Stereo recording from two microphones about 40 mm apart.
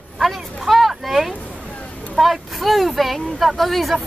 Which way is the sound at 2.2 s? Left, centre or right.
Centre.